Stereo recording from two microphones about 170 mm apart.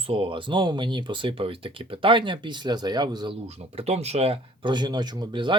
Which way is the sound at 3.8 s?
40° right (ahead or behind).